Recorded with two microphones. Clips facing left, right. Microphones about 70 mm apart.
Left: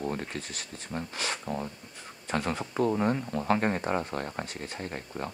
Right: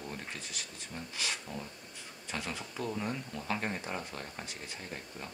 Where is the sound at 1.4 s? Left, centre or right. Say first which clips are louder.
Left 9 dB; left.